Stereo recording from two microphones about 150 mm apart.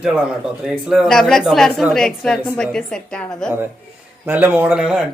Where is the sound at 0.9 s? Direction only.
Centre (ahead or behind).